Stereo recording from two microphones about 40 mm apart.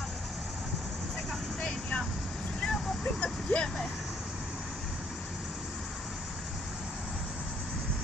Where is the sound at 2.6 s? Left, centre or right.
Centre.